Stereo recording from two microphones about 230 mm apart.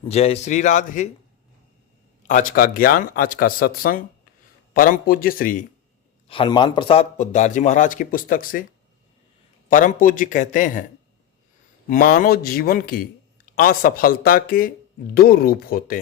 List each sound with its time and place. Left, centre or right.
0.0 s speech: left
2.2 s speech: left
6.2 s speech: left
9.6 s speech: left
11.9 s speech: left